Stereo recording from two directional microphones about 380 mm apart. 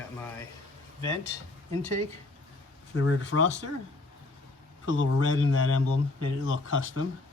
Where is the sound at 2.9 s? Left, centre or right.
Left.